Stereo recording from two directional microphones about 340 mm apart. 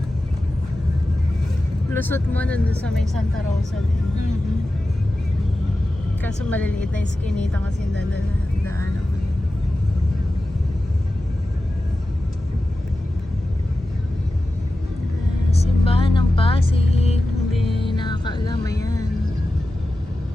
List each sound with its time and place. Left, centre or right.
1.9 s speech: centre
6.2 s speech: centre
15.6 s vehicle: centre
17.6 s music: centre